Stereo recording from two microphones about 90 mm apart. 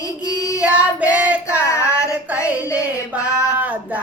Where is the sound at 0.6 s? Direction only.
15° right (ahead or behind).